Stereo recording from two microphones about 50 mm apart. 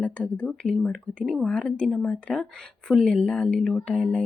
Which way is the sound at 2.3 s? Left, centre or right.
Centre.